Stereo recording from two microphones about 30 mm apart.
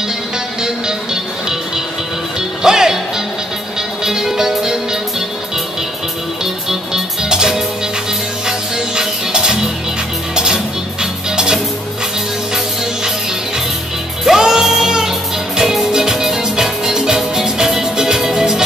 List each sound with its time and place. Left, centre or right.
2.6 s music: centre
4.0 s music: centre
6.4 s music: centre
14.2 s music: centre